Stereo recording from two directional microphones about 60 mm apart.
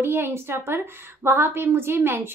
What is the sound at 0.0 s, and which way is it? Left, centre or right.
A woman's voice, right.